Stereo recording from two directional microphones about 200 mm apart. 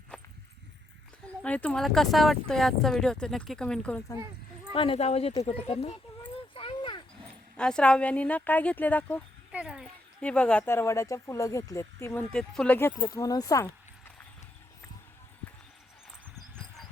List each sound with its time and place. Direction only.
0.1 s a sound: 5° left (ahead or behind)
1.4 s speech: 5° left (ahead or behind)
4.7 s speech: 30° left (ahead or behind)
5.4 s a sound: 30° left (ahead or behind)
7.5 s speech: 5° left (ahead or behind)
9.5 s speech: 5° right (ahead or behind)
13.0 s speech: 20° left (ahead or behind)